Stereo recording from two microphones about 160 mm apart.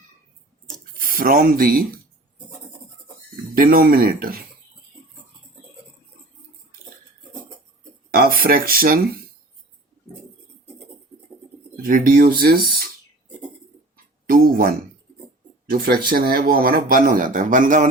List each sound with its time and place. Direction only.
0.9 s speech: 60° right (ahead or behind)
3.5 s speech: 65° right (ahead or behind)
8.1 s speech: 70° right (ahead or behind)
11.9 s speech: 60° right (ahead or behind)
13.9 s a sound: 65° right (ahead or behind)
15.6 s speech: 70° right (ahead or behind)